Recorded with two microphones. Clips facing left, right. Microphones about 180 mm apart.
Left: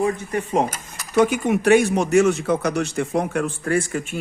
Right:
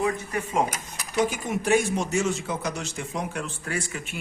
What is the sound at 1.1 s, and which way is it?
A man's voice, 60° left (ahead or behind).